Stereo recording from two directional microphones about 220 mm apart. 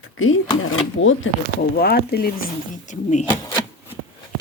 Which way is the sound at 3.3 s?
20° left (ahead or behind).